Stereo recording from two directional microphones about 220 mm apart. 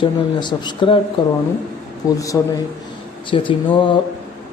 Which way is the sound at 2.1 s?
15° left (ahead or behind).